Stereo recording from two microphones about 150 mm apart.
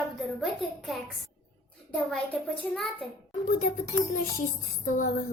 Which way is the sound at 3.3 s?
60° left (ahead or behind).